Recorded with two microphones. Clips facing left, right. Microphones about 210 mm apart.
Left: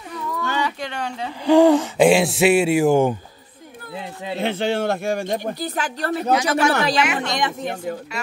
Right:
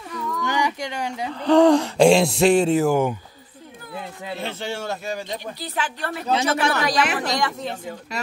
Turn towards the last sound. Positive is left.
turn(degrees=20)  # may be behind; listen again after turning